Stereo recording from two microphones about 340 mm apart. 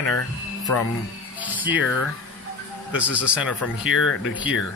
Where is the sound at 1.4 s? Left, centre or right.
Centre.